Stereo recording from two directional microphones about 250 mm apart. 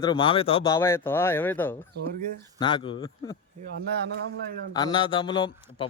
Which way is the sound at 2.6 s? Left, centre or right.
Centre.